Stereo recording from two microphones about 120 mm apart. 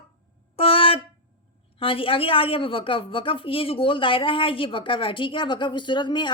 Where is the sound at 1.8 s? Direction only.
50° left (ahead or behind).